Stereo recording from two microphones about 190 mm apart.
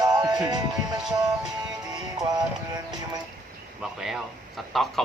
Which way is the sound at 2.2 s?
20° right (ahead or behind).